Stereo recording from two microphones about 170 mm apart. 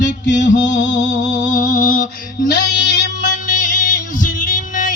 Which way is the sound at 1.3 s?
50° left (ahead or behind).